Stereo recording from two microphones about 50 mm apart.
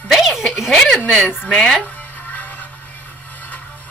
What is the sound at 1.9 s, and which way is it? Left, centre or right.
Music, left.